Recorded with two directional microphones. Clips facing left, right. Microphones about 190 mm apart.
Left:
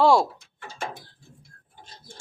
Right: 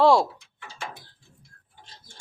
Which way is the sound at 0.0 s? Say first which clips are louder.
Even; centre (ahead or behind).